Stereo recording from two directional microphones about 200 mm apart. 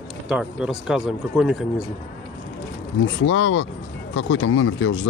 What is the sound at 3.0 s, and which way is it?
Speech, 70° left (ahead or behind).